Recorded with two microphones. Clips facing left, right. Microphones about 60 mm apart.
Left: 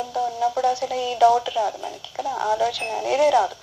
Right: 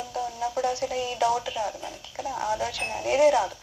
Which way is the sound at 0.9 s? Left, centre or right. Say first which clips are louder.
Left 8 dB; left.